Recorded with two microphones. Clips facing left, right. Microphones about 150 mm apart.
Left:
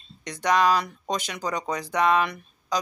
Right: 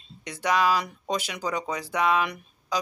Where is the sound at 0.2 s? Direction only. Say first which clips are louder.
Left 2 dB; 5° right (ahead or behind).